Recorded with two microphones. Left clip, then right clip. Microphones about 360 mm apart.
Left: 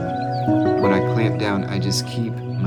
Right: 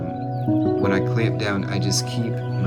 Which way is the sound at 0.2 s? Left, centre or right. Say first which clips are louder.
Left 3 dB; left.